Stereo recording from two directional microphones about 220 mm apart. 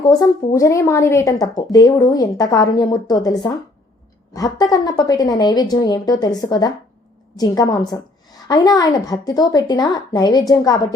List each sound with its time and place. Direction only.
0.0 s speech: 15° left (ahead or behind)